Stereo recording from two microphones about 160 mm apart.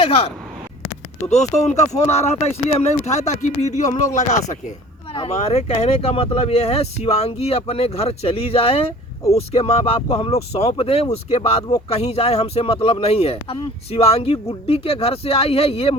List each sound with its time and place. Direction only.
0.0 s speech: 40° left (ahead or behind)
1.3 s speech: 45° left (ahead or behind)
5.1 s speech: 40° left (ahead or behind)